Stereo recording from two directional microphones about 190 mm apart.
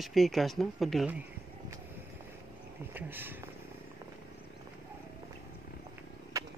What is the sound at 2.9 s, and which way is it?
Speech, 10° right (ahead or behind).